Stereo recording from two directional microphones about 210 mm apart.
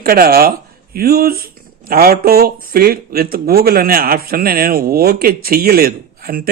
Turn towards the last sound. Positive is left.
turn(degrees=-45)  # may be behind; listen again after turning